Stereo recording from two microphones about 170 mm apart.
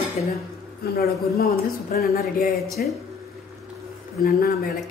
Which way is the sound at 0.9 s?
60° left (ahead or behind).